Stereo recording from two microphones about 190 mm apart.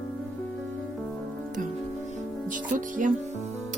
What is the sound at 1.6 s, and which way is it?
Music, 45° right (ahead or behind).